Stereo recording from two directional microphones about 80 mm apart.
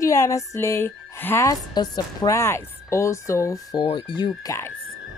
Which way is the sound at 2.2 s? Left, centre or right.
Left.